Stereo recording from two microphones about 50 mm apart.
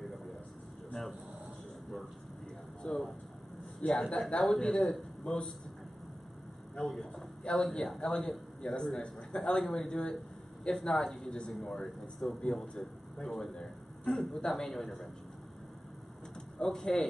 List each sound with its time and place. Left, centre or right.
2.8 s a man's voice: centre
6.8 s a man's voice: centre
12.3 s speech: left
12.5 s a man's voice: centre
13.6 s a sound: centre
14.5 s a man's voice: centre
16.5 s a man's voice: centre